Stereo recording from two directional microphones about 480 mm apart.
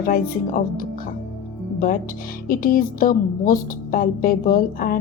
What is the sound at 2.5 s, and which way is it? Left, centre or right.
Speech, centre.